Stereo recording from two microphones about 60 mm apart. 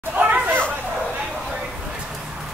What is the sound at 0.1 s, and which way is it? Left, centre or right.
Chatter, right.